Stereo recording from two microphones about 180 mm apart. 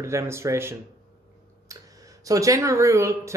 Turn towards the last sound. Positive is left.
turn(degrees=-15)  # may be behind; listen again after turning